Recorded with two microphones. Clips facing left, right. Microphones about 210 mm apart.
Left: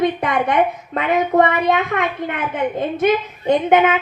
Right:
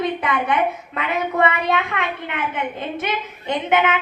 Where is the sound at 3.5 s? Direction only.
40° left (ahead or behind).